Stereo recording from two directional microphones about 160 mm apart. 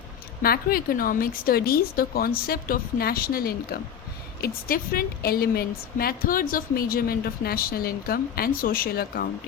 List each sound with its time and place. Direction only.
0.4 s a woman's voice: 70° left (ahead or behind)